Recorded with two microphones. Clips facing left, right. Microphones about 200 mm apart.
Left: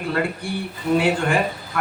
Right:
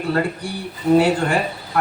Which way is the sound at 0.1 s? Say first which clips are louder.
Right 2 dB; 40° right (ahead or behind).